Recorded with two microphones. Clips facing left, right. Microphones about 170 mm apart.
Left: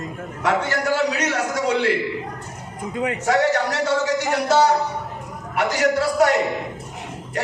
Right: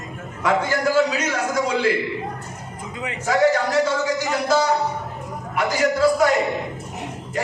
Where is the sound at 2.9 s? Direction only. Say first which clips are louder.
Left 7 dB; 50° left (ahead or behind).